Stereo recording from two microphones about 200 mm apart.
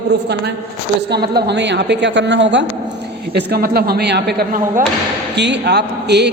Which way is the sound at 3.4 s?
50° right (ahead or behind).